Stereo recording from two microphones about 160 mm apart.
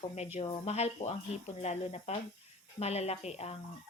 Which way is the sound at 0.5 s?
40° left (ahead or behind).